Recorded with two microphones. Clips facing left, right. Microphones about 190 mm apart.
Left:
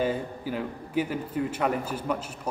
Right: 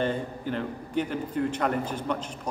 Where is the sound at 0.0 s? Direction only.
5° left (ahead or behind).